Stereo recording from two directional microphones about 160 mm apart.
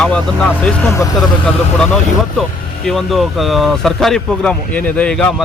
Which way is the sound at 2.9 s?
Centre (ahead or behind).